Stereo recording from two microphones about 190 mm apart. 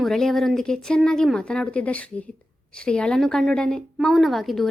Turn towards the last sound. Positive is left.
turn(degrees=0)  # may be behind; listen again after turning